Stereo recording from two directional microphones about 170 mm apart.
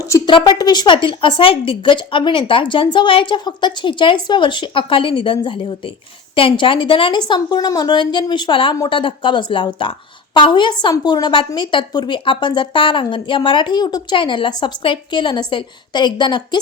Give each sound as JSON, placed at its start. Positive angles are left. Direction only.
{"t": 0.3, "sound": "a woman's voice", "side_deg": 30}